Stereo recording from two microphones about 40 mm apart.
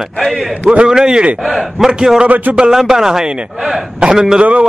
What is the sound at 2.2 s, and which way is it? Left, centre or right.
Speech, right.